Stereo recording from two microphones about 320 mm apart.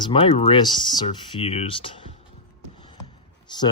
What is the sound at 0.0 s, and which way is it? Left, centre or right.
Speech, centre.